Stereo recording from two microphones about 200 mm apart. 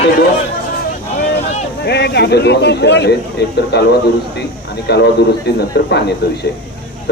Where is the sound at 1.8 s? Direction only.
55° left (ahead or behind).